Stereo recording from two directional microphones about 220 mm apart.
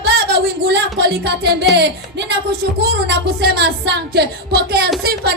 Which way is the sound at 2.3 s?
45° right (ahead or behind).